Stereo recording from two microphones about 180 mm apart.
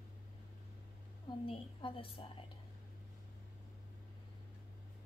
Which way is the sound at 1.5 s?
30° left (ahead or behind).